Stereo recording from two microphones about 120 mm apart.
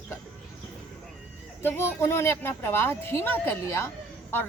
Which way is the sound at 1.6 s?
20° left (ahead or behind).